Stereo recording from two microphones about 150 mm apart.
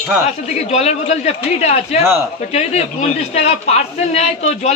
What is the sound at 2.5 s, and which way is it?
A man's voice, 45° left (ahead or behind).